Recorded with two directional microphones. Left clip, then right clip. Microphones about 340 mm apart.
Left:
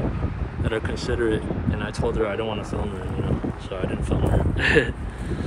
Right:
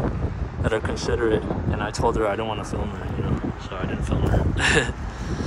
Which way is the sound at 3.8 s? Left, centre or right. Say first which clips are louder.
Left 2 dB; centre.